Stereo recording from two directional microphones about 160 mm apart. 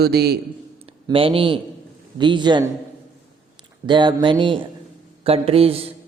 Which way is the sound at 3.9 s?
30° right (ahead or behind).